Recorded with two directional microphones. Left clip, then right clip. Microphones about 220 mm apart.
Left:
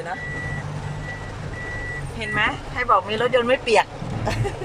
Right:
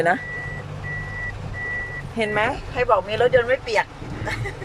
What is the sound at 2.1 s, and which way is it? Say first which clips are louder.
Speech: right 1 dB; 25° right (ahead or behind).